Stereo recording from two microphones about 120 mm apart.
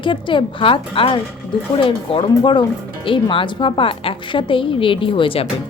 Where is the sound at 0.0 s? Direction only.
45° left (ahead or behind).